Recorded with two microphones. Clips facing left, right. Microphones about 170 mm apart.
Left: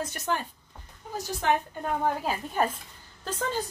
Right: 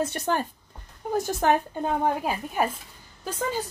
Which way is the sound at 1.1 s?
50° right (ahead or behind).